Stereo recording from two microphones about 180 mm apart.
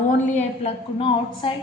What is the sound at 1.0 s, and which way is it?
Speech, 30° left (ahead or behind).